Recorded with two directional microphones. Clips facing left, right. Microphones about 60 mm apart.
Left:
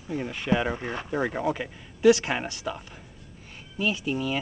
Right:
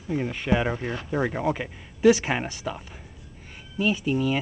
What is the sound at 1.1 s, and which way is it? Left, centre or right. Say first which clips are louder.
Speech: right 1 dB; centre.